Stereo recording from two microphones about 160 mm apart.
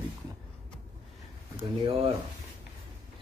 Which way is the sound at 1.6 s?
35° right (ahead or behind).